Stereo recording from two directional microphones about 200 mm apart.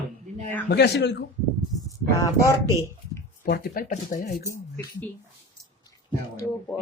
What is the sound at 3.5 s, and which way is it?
Speech, 50° left (ahead or behind).